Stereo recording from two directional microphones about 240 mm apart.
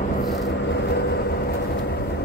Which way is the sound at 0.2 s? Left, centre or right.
Left.